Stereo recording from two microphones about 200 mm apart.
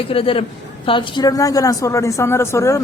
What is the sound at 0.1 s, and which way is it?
A woman's voice, 25° left (ahead or behind).